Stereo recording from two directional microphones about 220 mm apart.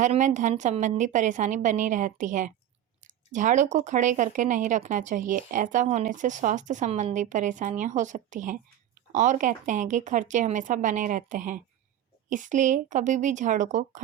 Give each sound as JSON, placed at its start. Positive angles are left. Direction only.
{"t": 0.0, "sound": "speech", "side_deg": -35}